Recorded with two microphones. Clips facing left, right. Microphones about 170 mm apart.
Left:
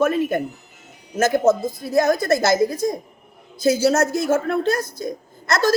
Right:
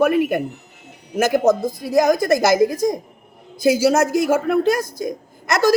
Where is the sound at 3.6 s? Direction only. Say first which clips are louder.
Right 2 dB; 15° right (ahead or behind).